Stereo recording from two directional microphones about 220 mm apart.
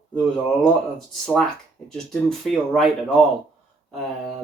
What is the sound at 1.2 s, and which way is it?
Speech, centre (ahead or behind).